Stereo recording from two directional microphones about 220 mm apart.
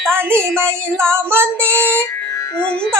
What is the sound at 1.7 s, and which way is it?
Music, 5° left (ahead or behind).